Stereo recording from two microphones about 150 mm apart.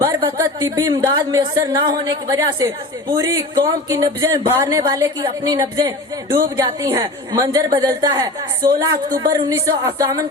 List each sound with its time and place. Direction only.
0.0 s speech: 30° right (ahead or behind)